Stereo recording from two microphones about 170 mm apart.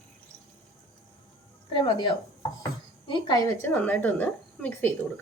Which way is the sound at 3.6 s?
10° left (ahead or behind).